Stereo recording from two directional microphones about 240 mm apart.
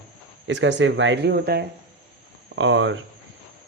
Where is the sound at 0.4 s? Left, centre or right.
Right.